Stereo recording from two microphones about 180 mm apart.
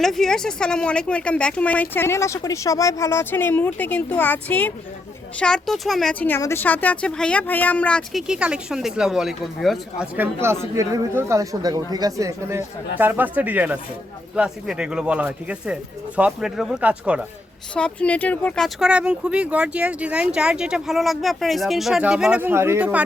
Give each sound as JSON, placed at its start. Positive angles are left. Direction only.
{"t": 0.0, "sound": "speech", "side_deg": 0}
{"t": 10.2, "sound": "speech", "side_deg": -15}
{"t": 17.7, "sound": "speech", "side_deg": 5}